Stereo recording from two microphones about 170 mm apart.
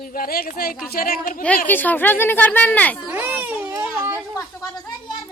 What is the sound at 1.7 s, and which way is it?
A woman's voice, 10° left (ahead or behind).